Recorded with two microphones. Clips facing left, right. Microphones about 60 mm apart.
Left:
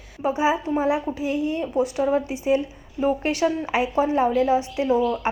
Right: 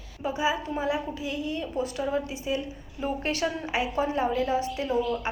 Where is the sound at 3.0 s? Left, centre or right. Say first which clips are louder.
Left 7 dB; left.